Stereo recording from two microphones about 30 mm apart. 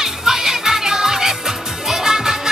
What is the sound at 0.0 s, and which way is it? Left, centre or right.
Music, centre.